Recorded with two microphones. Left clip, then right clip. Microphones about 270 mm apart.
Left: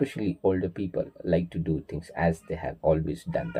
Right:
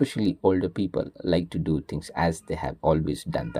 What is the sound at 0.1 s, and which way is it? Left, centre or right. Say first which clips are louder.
Speech: right 3 dB; right.